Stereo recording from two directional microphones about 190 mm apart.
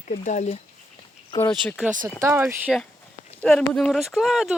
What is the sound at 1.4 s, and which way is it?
Speech, 10° left (ahead or behind).